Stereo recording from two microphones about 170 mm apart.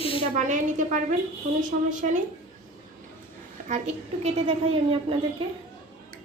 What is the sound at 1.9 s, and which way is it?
Speech, 50° right (ahead or behind).